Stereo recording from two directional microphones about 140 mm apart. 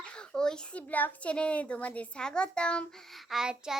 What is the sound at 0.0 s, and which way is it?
A child's voice, 5° left (ahead or behind).